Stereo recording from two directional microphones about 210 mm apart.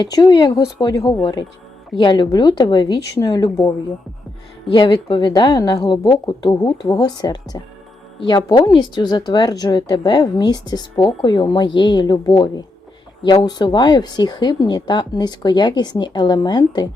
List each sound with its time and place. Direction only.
0.0 s speech: 20° left (ahead or behind)
4.7 s speech: 20° left (ahead or behind)